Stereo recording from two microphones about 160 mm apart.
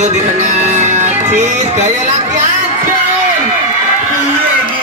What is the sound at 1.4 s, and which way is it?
Speech, 45° right (ahead or behind).